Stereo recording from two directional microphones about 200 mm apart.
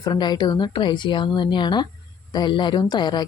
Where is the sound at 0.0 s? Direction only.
20° left (ahead or behind).